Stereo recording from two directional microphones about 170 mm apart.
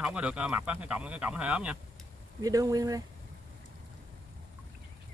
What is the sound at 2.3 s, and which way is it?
Speech, 20° right (ahead or behind).